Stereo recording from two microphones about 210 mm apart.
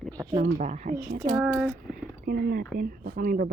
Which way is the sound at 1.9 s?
45° right (ahead or behind).